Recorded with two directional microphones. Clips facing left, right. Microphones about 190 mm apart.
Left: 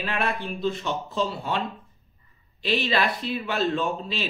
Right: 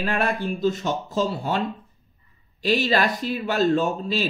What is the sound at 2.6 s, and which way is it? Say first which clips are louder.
A man's voice: right 3 dB; 45° right (ahead or behind).